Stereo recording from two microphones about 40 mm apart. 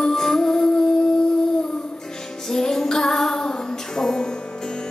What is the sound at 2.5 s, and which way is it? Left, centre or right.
Music, centre.